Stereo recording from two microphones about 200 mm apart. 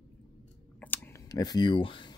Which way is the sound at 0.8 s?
10° left (ahead or behind).